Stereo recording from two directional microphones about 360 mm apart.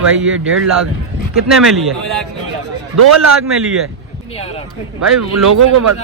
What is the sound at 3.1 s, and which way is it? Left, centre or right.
Speech, right.